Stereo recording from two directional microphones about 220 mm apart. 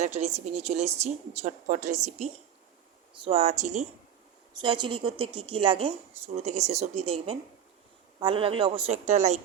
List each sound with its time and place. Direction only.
0.0 s speech: 30° right (ahead or behind)
4.6 s speech: 20° right (ahead or behind)